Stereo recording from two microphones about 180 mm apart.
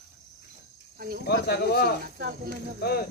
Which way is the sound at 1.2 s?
65° left (ahead or behind).